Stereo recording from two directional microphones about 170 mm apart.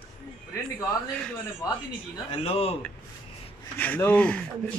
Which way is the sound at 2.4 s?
35° left (ahead or behind).